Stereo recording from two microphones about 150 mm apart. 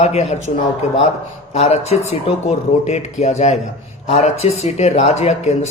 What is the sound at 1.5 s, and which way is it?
Speech, 45° left (ahead or behind).